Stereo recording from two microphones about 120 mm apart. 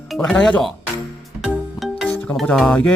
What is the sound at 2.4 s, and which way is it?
Speech, 10° left (ahead or behind).